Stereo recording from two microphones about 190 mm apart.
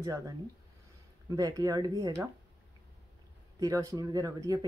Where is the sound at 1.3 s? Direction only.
20° right (ahead or behind).